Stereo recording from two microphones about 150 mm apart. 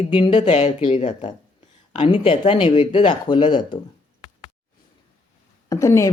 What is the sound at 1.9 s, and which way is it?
Speech, 35° left (ahead or behind).